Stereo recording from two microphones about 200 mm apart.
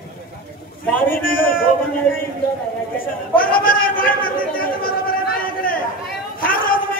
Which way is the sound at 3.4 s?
45° left (ahead or behind).